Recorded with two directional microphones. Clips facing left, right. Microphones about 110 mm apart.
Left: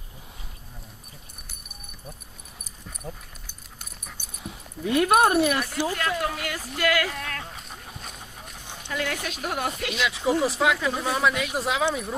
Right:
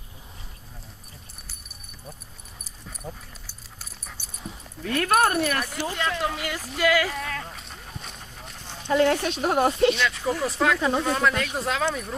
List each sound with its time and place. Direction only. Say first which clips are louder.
2.8 s dog: even; centre (ahead or behind)
4.0 s speech: even; 10° left (ahead or behind)
6.7 s a sound: right 2 dB; centre (ahead or behind)
8.9 s speech: right 9 dB; 35° right (ahead or behind)
10.0 s speech: left 2 dB; 15° left (ahead or behind)
10.8 s speech: right 4 dB; 30° right (ahead or behind)
11.0 s speech: right 1 dB; 10° left (ahead or behind)